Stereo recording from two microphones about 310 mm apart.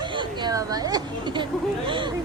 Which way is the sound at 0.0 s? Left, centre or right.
Centre.